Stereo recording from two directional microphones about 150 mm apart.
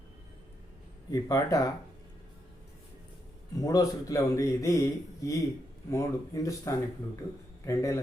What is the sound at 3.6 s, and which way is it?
Speech, 25° left (ahead or behind).